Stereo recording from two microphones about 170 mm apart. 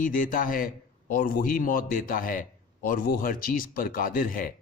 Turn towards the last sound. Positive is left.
turn(degrees=55)  # may be behind; listen again after turning